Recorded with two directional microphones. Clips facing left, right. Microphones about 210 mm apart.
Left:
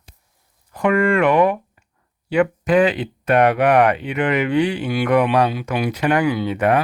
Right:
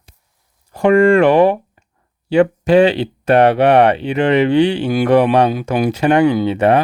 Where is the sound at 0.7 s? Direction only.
30° right (ahead or behind).